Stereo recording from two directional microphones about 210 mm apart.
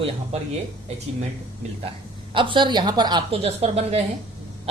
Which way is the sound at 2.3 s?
25° right (ahead or behind).